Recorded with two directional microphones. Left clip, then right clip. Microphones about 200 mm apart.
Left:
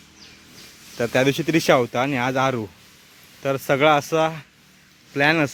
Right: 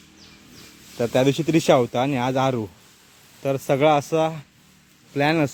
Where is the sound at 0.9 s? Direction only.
Centre (ahead or behind).